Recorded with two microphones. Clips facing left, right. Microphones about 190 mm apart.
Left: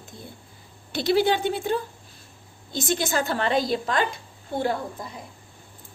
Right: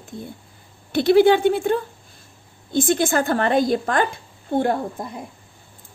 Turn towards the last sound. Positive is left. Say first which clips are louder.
# right 5 dB
turn(degrees=-55)  # may be behind; listen again after turning